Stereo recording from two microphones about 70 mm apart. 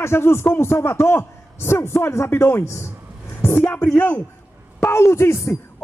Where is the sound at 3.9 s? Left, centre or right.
Left.